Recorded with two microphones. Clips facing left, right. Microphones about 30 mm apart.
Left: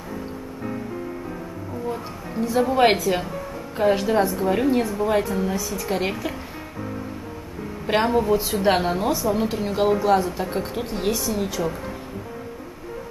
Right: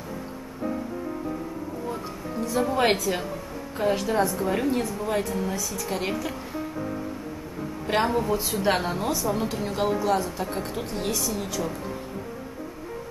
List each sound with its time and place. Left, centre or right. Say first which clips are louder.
2.4 s a woman's voice: left 5 dB; centre
7.8 s a woman's voice: left 4 dB; centre